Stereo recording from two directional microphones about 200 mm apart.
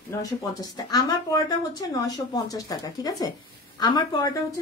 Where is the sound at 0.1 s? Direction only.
15° left (ahead or behind).